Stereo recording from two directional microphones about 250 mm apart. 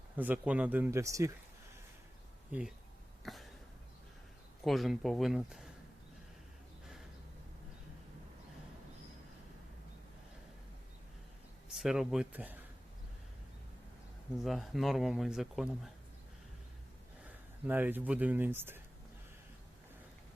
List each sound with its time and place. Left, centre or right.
0.2 s speech: centre
2.5 s speech: centre
3.2 s a sound: centre
4.6 s speech: centre
11.7 s speech: centre
14.4 s speech: centre
17.7 s speech: centre